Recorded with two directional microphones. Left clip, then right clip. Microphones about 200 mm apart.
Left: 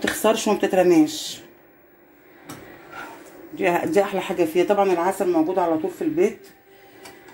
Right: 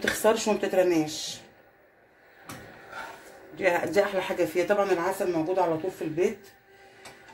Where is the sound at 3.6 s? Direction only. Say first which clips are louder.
Left 4 dB; 35° left (ahead or behind).